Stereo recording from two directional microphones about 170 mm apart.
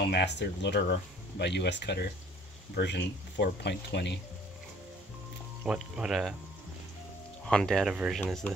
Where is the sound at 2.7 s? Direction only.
90° left.